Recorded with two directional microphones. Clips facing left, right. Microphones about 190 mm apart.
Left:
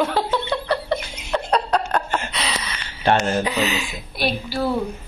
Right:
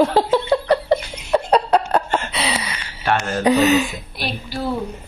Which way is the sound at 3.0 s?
25° left (ahead or behind).